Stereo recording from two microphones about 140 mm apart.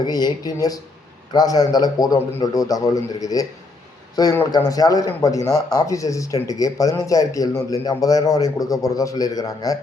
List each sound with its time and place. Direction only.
0.0 s speech: 30° left (ahead or behind)